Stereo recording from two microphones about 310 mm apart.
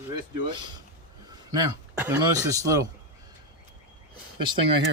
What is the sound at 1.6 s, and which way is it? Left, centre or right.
Speech, centre.